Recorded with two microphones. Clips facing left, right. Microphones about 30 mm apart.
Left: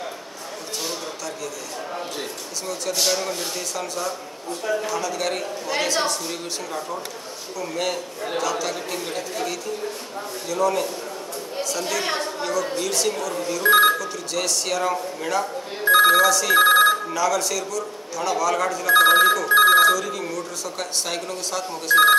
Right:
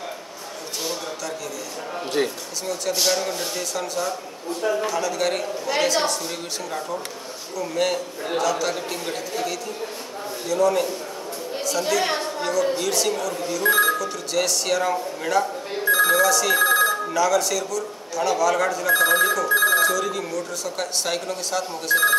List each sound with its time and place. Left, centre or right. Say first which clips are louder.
2.6 s speech: right 1 dB; centre
13.7 s speech: left 3 dB; left
13.9 s speech: right 2 dB; centre
15.8 s telephone bell ringing: left 4 dB; left
16.1 s speech: left 2 dB; centre
16.5 s speech: left 7 dB; left
17.1 s speech: right 2 dB; centre
19.0 s speech: left 3 dB; left
19.8 s speech: left 3 dB; centre